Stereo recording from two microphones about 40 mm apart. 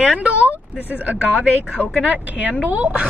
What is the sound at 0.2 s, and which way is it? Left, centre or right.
Speech, right.